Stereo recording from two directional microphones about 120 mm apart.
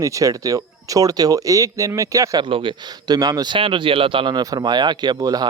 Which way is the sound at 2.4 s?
45° right (ahead or behind).